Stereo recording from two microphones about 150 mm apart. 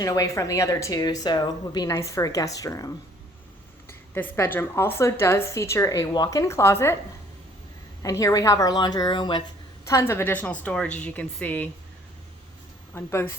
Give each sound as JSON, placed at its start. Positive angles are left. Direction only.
{"t": 0.0, "sound": "a woman's voice", "side_deg": 25}
{"t": 8.0, "sound": "speech", "side_deg": 20}
{"t": 9.8, "sound": "a woman's voice", "side_deg": 20}
{"t": 12.9, "sound": "speech", "side_deg": 15}